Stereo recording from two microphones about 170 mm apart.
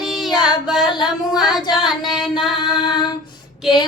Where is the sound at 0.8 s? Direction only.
25° left (ahead or behind).